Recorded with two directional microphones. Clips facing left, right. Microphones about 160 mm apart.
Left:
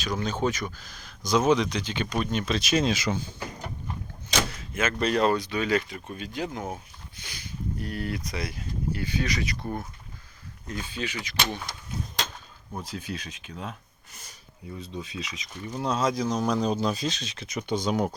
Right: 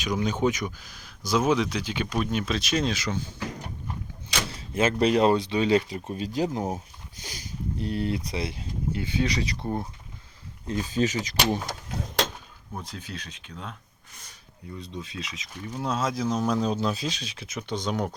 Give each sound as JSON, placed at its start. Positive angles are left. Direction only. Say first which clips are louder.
{"t": 0.0, "sound": "speech", "louder": "right 2 dB", "side_deg": -15}
{"t": 4.4, "sound": "door", "louder": "right 4 dB", "side_deg": -30}
{"t": 5.2, "sound": "speech", "louder": "right 3 dB", "side_deg": -25}
{"t": 7.8, "sound": "speech", "louder": "right 6 dB", "side_deg": -25}
{"t": 12.7, "sound": "speech", "louder": "left 3 dB", "side_deg": 5}
{"t": 14.8, "sound": "speech", "louder": "left 1 dB", "side_deg": 5}